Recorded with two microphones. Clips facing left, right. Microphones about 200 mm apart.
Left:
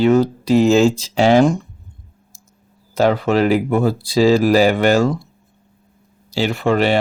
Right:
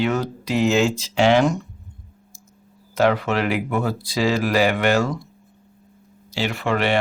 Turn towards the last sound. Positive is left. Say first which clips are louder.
# left 5 dB
turn(degrees=35)  # may be behind; listen again after turning